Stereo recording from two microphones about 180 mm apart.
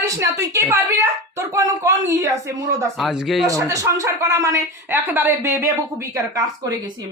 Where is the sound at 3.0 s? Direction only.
Centre (ahead or behind).